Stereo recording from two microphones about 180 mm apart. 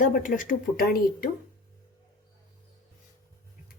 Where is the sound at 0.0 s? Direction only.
50° left (ahead or behind).